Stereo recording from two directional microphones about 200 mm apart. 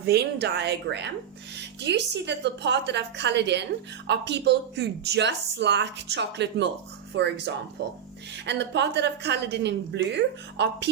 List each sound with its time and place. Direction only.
0.0 s a woman's voice: 55° right (ahead or behind)